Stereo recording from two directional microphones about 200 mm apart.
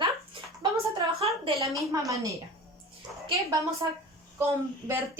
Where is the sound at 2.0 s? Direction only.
15° right (ahead or behind).